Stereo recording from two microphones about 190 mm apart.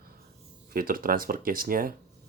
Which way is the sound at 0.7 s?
50° right (ahead or behind).